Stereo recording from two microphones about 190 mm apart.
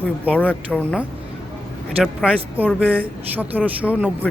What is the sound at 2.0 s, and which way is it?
Speech, 5° right (ahead or behind).